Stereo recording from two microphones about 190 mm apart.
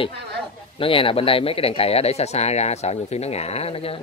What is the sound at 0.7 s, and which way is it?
Speech, 30° left (ahead or behind).